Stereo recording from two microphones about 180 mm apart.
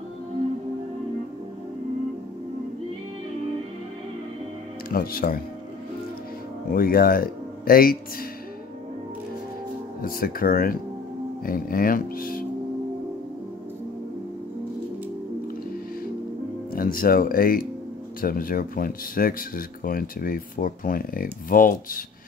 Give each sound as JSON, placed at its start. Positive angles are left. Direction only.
{"t": 4.9, "sound": "speech", "side_deg": 55}
{"t": 6.7, "sound": "speech", "side_deg": 55}
{"t": 10.0, "sound": "speech", "side_deg": 50}
{"t": 16.7, "sound": "speech", "side_deg": 55}